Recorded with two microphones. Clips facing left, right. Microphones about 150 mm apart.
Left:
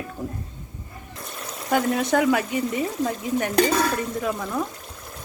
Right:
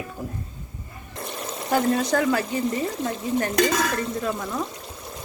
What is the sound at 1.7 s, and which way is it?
Speech, centre (ahead or behind).